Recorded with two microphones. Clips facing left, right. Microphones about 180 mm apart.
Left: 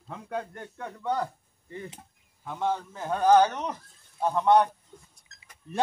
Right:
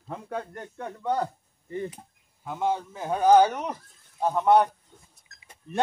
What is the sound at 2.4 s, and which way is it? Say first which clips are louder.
Speech: right 2 dB; 10° right (ahead or behind).